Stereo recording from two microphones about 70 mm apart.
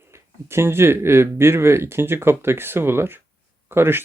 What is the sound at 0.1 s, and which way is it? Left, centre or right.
Speech, right.